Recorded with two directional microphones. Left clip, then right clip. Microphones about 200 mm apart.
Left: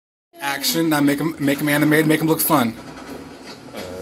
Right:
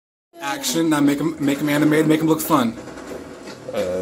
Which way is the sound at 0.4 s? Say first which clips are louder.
Left 1 dB; 15° left (ahead or behind).